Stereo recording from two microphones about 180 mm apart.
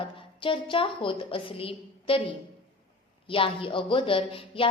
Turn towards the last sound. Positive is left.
turn(degrees=30)  # may be behind; listen again after turning